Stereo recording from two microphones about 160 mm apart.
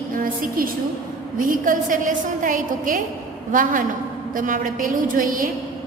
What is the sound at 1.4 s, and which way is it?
A woman's voice, 60° right (ahead or behind).